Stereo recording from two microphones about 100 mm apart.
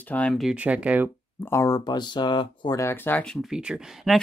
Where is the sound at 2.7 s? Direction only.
25° left (ahead or behind).